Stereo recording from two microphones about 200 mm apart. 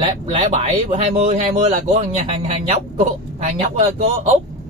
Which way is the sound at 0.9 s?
30° right (ahead or behind).